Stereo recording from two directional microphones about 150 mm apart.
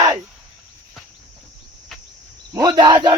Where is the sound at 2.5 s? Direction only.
25° right (ahead or behind).